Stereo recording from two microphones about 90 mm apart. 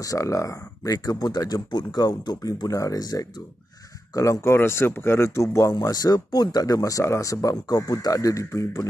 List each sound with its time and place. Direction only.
0.0 s a man's voice: 40° left (ahead or behind)